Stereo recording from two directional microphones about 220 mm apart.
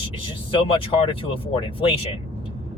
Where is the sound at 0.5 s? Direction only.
25° left (ahead or behind).